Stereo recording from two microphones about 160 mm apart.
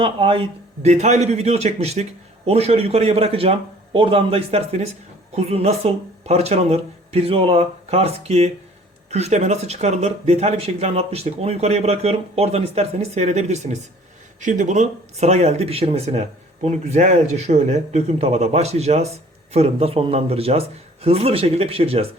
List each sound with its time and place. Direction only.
0.0 s a man's voice: 35° right (ahead or behind)